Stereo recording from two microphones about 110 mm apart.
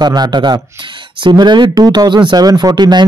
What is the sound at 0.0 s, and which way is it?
Speech, 40° right (ahead or behind).